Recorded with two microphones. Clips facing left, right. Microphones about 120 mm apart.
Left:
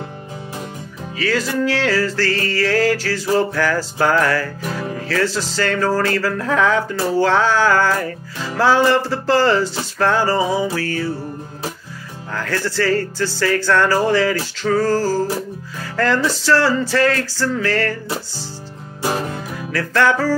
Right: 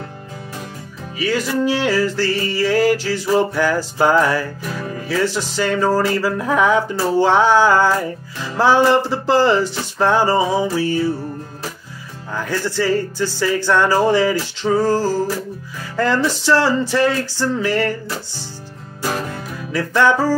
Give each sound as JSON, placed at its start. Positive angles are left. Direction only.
{"t": 1.1, "sound": "music", "side_deg": -15}
{"t": 12.4, "sound": "music", "side_deg": -15}
{"t": 19.0, "sound": "music", "side_deg": 20}
{"t": 19.7, "sound": "music", "side_deg": -15}